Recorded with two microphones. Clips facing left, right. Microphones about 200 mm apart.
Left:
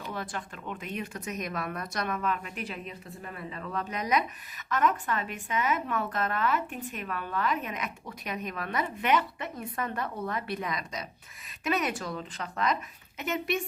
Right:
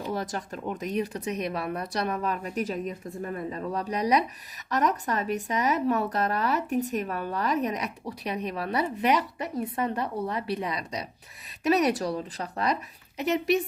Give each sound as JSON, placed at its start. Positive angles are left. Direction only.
{"t": 0.0, "sound": "speech", "side_deg": -40}